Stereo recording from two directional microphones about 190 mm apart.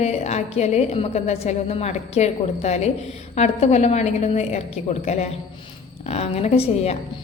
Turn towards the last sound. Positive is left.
turn(degrees=30)  # may be behind; listen again after turning